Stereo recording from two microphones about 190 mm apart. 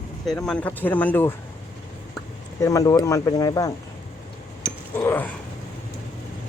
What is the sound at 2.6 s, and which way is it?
Speech, 20° left (ahead or behind).